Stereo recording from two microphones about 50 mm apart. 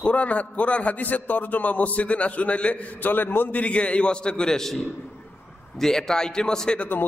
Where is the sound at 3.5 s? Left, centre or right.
Left; by 4.8 s centre.